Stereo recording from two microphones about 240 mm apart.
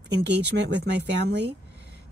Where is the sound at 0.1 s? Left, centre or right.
Right.